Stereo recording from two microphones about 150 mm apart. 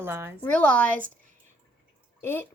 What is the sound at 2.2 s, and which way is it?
Speech, 15° left (ahead or behind).